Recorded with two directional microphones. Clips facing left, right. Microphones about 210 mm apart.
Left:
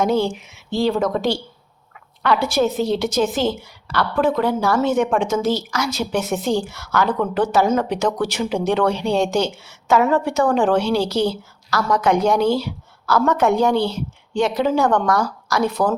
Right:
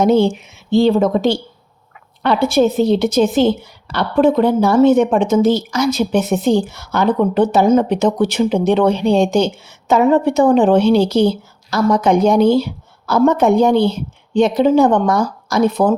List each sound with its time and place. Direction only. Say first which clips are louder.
0.0 s a woman's voice: right 6 dB; 25° right (ahead or behind)
2.9 s a woman's voice: right 6 dB; 20° right (ahead or behind)